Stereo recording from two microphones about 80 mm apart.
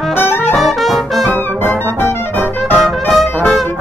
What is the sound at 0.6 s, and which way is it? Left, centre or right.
Brass instrument, centre.